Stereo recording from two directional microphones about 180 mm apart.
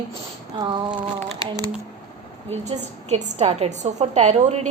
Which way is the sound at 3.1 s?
35° right (ahead or behind).